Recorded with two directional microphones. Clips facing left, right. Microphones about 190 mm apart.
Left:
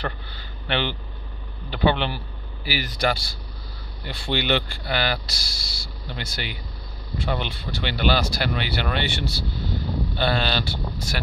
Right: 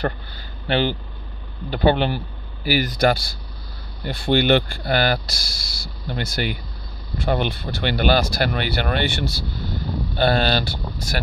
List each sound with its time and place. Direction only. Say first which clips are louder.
0.7 s speech: right 5 dB; 40° right (ahead or behind)